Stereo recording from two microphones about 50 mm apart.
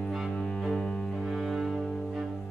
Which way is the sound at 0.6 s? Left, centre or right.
Centre.